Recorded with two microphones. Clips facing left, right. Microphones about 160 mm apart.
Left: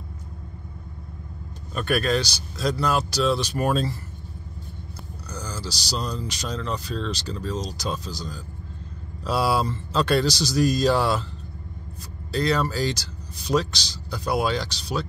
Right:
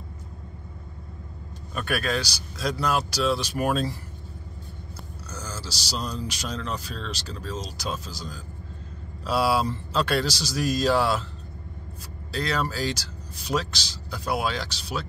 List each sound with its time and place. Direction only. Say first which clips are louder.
1.7 s a man's voice: left 4 dB; 5° right (ahead or behind)
5.3 s a man's voice: left 3 dB; 5° right (ahead or behind)
12.4 s speech: left 4 dB; 5° right (ahead or behind)